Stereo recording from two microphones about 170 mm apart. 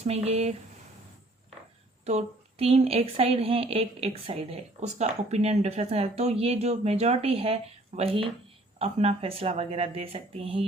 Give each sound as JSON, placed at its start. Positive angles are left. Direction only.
{"t": 0.0, "sound": "a woman's voice", "side_deg": -40}
{"t": 2.0, "sound": "a woman's voice", "side_deg": -40}